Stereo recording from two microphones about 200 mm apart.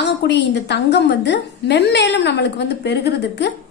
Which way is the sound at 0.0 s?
60° left (ahead or behind).